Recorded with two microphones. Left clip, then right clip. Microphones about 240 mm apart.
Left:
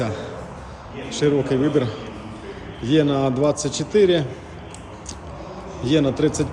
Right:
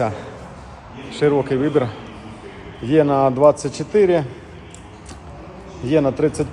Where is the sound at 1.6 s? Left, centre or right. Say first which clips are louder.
Right 2 dB; right.